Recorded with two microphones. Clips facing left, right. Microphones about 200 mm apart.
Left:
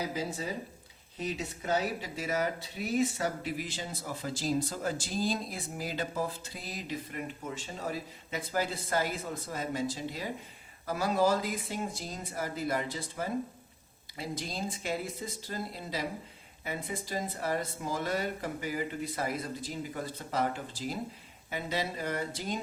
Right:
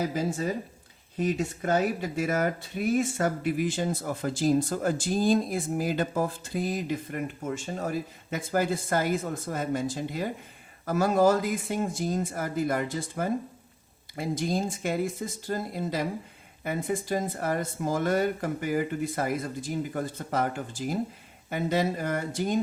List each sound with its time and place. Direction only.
0.0 s speech: 50° right (ahead or behind)